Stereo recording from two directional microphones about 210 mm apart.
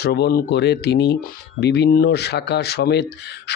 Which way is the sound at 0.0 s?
50° left (ahead or behind).